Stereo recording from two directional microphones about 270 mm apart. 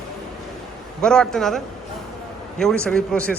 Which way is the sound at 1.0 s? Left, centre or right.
Centre.